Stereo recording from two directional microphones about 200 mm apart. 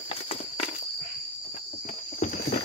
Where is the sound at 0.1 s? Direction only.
30° left (ahead or behind).